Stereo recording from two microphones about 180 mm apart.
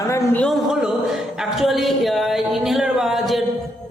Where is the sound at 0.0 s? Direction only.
15° left (ahead or behind).